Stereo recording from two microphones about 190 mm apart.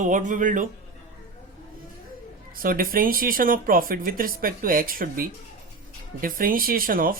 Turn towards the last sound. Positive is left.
turn(degrees=-50)  # may be behind; listen again after turning